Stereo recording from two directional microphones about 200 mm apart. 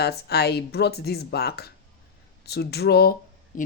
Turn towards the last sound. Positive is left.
turn(degrees=50)  # may be behind; listen again after turning